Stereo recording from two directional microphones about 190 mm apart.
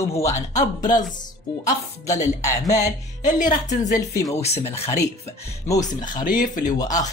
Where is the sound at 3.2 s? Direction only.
40° left (ahead or behind).